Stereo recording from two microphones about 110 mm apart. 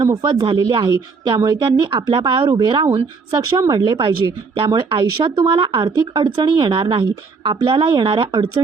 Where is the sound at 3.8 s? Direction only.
50° right (ahead or behind).